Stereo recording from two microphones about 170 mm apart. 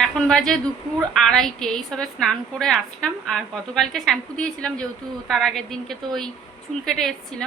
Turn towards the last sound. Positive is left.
turn(degrees=0)  # may be behind; listen again after turning